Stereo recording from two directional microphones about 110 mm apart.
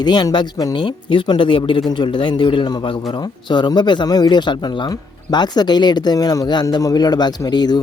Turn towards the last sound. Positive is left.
turn(degrees=40)  # may be behind; listen again after turning